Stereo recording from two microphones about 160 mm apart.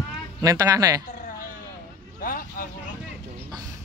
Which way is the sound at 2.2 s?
60° left (ahead or behind).